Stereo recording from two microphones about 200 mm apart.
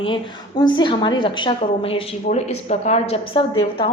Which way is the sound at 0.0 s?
25° left (ahead or behind).